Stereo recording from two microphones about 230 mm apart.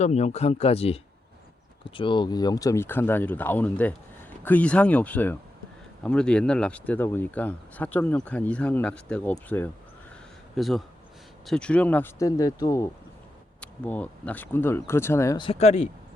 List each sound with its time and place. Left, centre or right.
0.0 s speech: left
2.0 s speech: centre